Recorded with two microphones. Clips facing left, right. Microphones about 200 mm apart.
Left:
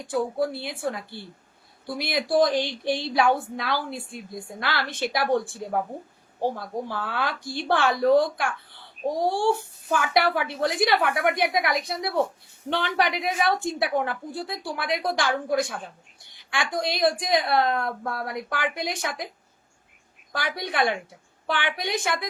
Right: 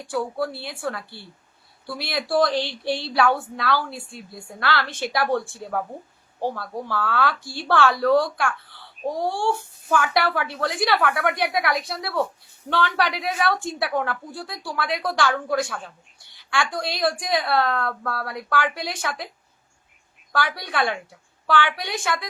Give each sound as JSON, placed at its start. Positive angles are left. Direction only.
{"t": 0.0, "sound": "a woman's voice", "side_deg": 20}
{"t": 20.3, "sound": "a woman's voice", "side_deg": 20}